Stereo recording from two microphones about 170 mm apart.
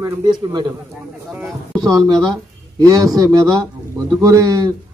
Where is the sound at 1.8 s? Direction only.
20° right (ahead or behind).